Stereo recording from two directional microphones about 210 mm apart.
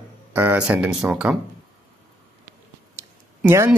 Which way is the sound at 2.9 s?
15° right (ahead or behind).